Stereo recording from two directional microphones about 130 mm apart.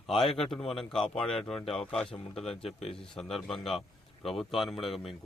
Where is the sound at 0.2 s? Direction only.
Centre (ahead or behind).